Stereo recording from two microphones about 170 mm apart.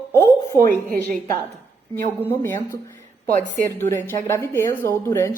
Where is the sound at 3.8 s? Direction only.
10° left (ahead or behind).